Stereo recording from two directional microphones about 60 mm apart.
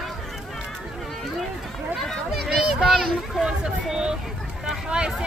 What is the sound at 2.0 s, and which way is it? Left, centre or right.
Speech, centre.